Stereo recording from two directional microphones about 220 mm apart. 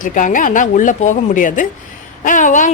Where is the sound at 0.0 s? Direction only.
35° left (ahead or behind).